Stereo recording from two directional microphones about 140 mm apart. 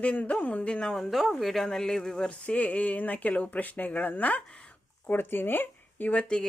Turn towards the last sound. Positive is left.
turn(degrees=5)  # may be behind; listen again after turning